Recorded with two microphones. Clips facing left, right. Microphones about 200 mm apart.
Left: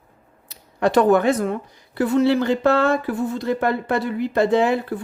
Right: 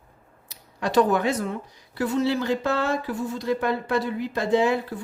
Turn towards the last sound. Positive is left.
turn(degrees=55)  # may be behind; listen again after turning